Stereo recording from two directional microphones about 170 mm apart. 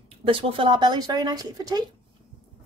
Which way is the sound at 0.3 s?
30° right (ahead or behind).